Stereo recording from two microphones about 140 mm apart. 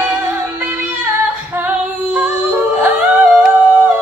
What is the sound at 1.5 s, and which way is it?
Female singing, 15° right (ahead or behind).